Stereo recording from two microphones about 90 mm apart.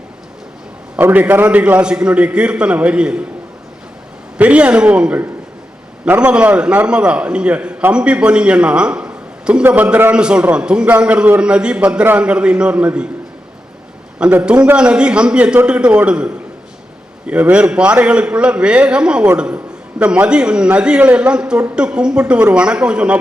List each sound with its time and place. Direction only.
0.9 s a man's voice: 20° right (ahead or behind)
4.4 s a man's voice: 15° right (ahead or behind)
14.4 s a man's voice: 15° right (ahead or behind)